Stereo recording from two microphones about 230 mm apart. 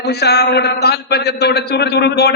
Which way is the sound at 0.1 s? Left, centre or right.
Left.